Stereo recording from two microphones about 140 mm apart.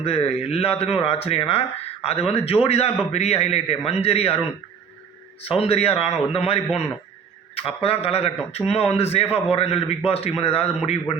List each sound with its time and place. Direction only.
0.0 s a man's voice: 45° left (ahead or behind)
5.4 s a man's voice: 45° left (ahead or behind)